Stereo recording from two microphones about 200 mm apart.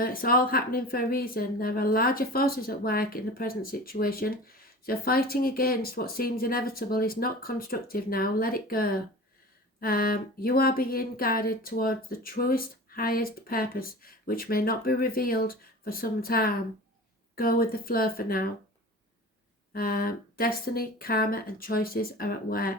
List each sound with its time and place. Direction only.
0.0 s speech: 45° left (ahead or behind)
19.7 s speech: 45° left (ahead or behind)